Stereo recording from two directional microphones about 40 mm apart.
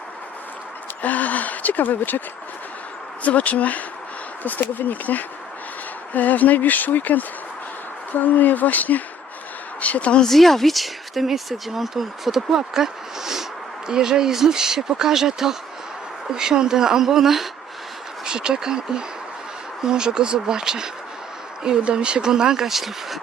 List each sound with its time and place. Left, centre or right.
1.0 s speech: left
3.2 s speech: left
10.2 s speech: centre
18.3 s speech: centre